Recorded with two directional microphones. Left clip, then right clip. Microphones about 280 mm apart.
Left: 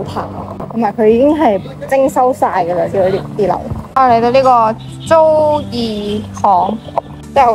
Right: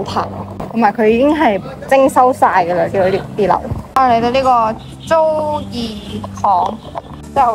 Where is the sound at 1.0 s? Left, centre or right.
Centre.